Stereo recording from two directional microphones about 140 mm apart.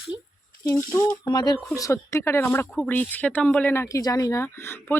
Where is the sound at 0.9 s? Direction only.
30° left (ahead or behind).